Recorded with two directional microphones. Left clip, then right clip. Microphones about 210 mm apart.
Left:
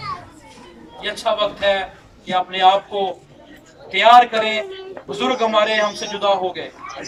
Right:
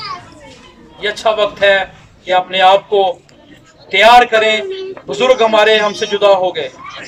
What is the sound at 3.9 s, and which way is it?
A man's voice, 40° right (ahead or behind).